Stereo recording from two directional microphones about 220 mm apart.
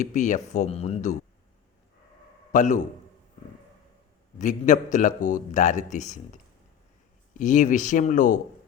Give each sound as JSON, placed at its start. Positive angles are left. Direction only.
{"t": 0.0, "sound": "speech", "side_deg": 35}
{"t": 2.5, "sound": "a man's voice", "side_deg": 35}
{"t": 4.4, "sound": "speech", "side_deg": 35}